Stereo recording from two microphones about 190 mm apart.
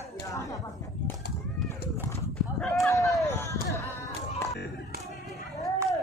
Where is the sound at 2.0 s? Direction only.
10° left (ahead or behind).